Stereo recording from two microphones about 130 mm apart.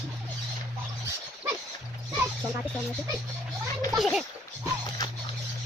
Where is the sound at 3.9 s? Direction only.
Centre (ahead or behind).